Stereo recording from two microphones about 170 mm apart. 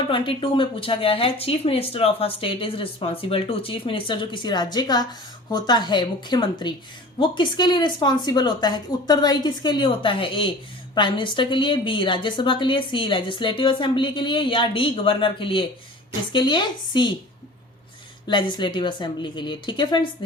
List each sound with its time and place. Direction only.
0.1 s a woman's voice: 30° left (ahead or behind)
18.3 s a woman's voice: 25° left (ahead or behind)